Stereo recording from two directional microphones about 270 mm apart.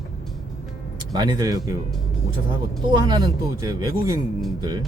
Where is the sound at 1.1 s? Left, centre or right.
Centre.